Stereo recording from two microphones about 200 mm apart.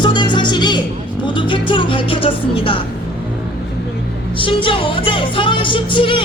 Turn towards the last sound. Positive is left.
turn(degrees=25)  # may be behind; listen again after turning